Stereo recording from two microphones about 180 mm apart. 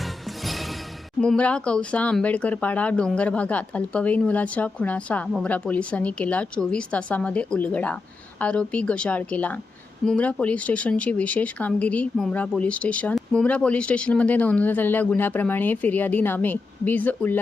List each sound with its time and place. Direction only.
0.0 s music: centre (ahead or behind)
1.2 s speech: 5° left (ahead or behind)